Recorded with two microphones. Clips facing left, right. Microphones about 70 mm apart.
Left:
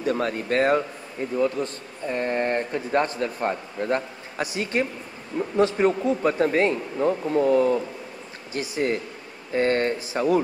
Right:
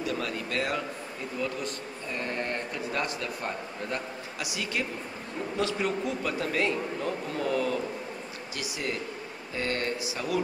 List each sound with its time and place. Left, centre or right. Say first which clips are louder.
0.0 s speech: left 7 dB; left